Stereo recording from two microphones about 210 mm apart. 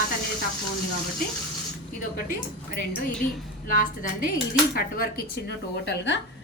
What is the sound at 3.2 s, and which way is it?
A woman's voice, 40° left (ahead or behind).